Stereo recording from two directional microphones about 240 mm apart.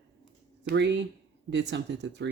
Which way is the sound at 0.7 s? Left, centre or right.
Right.